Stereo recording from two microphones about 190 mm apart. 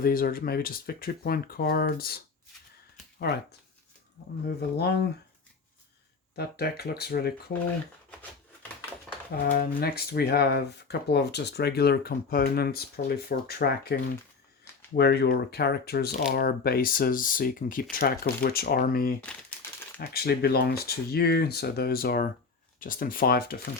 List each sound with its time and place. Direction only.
0.0 s speech: 50° left (ahead or behind)
4.4 s speech: 55° left (ahead or behind)
6.3 s speech: 55° left (ahead or behind)
9.3 s speech: 50° left (ahead or behind)
19.6 s a sound: 10° left (ahead or behind)
20.0 s speech: 55° left (ahead or behind)